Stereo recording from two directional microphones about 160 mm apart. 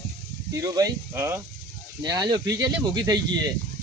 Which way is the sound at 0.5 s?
20° right (ahead or behind).